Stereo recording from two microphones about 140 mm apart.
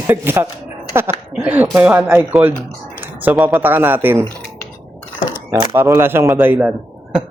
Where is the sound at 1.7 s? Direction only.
10° right (ahead or behind).